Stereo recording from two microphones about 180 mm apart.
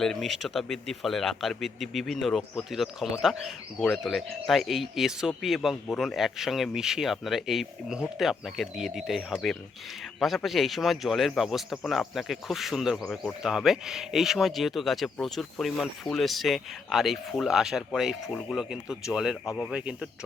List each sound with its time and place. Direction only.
0.0 s speech: centre (ahead or behind)